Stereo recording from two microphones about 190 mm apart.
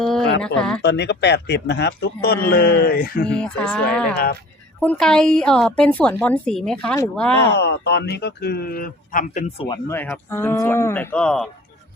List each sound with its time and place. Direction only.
0.0 s a sound: 5° left (ahead or behind)
0.4 s a woman's voice: 5° left (ahead or behind)
0.8 s speech: 65° left (ahead or behind)
3.2 s a woman's voice: 5° left (ahead or behind)
7.5 s speech: 60° left (ahead or behind); by 9.8 s 30° left (ahead or behind)
9.9 s speech: 10° left (ahead or behind)